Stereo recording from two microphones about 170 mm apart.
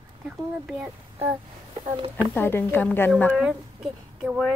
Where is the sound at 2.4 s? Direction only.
10° left (ahead or behind).